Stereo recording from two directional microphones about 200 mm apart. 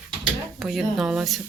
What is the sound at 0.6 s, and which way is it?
Speech, centre (ahead or behind).